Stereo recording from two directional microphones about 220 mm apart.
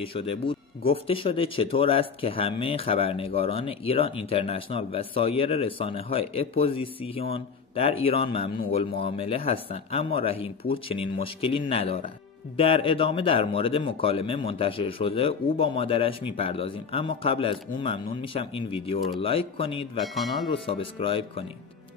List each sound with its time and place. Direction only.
0.0 s speech: 25° left (ahead or behind)
20.0 s speech: centre (ahead or behind)
20.7 s speech: 25° left (ahead or behind)